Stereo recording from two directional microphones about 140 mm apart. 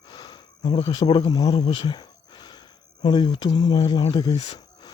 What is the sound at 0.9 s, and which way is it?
Speech, 35° left (ahead or behind).